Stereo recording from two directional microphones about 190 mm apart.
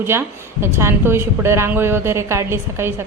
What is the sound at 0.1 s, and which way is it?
A woman's voice, 15° right (ahead or behind).